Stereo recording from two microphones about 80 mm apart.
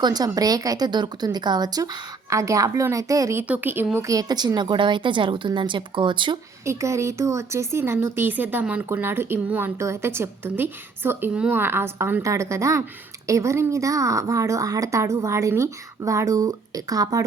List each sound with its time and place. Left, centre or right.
0.0 s speech: right
0.9 s speech: right
2.3 s a woman's voice: right
3.4 s a woman's voice: right
4.0 s a woman's voice: right
6.7 s a woman's voice: right
9.7 s a woman's voice: right